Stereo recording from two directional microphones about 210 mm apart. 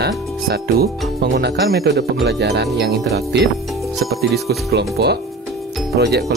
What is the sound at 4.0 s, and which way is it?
Speech, centre (ahead or behind).